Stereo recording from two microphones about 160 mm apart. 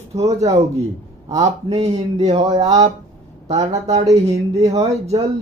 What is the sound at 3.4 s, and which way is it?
Speech, 45° right (ahead or behind).